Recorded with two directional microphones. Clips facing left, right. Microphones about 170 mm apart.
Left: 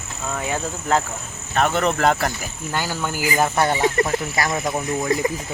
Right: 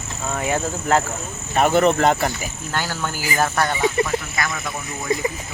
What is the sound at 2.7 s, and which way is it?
Speech, 10° left (ahead or behind).